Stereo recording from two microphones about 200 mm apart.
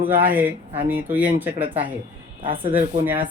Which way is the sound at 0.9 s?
10° right (ahead or behind).